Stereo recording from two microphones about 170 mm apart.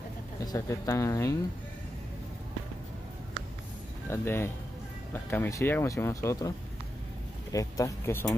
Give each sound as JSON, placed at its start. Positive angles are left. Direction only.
{"t": 0.4, "sound": "speech", "side_deg": 20}
{"t": 4.1, "sound": "speech", "side_deg": 15}
{"t": 7.5, "sound": "speech", "side_deg": 20}